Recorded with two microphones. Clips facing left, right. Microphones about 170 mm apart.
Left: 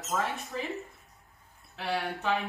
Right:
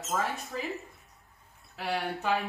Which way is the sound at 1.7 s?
Centre (ahead or behind).